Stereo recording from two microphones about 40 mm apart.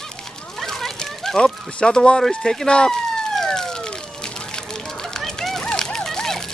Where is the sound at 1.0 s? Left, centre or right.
Centre.